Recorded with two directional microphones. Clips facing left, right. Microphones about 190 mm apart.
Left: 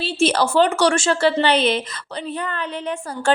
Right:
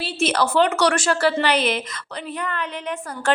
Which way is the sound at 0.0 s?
30° left (ahead or behind).